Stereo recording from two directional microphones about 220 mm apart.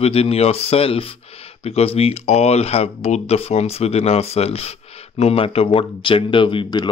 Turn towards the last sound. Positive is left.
turn(degrees=20)  # may be behind; listen again after turning